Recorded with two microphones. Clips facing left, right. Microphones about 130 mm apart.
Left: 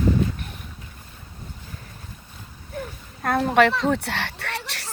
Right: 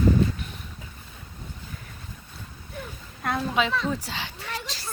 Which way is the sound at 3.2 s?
55° left (ahead or behind).